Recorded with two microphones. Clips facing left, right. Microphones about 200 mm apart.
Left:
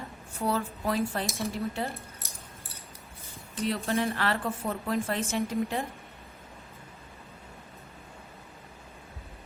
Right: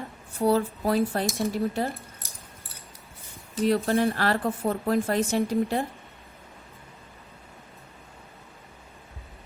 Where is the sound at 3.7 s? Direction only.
35° right (ahead or behind).